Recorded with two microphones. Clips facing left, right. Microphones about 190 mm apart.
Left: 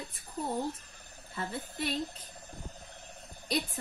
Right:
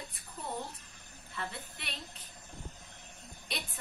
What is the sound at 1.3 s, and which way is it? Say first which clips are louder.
Speech: left 4 dB; 35° left (ahead or behind).